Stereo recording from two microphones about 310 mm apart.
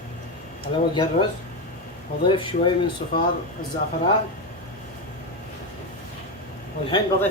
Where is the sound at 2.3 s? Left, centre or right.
Centre.